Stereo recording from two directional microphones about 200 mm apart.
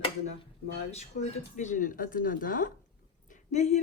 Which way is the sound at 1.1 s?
45° left (ahead or behind).